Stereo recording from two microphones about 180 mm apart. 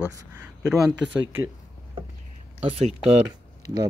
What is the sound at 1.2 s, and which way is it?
Speech, 90° right.